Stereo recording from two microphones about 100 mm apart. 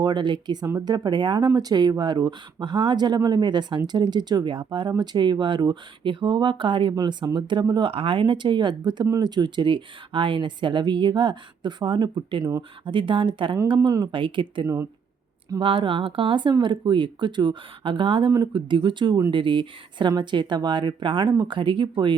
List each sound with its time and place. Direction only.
0.0 s speech: 50° right (ahead or behind)
0.6 s speech: 30° right (ahead or behind)
7.9 s a woman's voice: 65° right (ahead or behind)
13.8 s speech: 45° right (ahead or behind)